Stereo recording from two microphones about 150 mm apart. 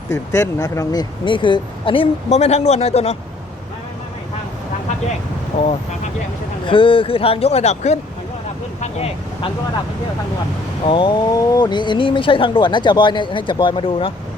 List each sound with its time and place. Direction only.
0.1 s speech: 20° left (ahead or behind); by 3.2 s 45° left (ahead or behind)
6.7 s speech: 35° left (ahead or behind)
10.8 s speech: 35° left (ahead or behind)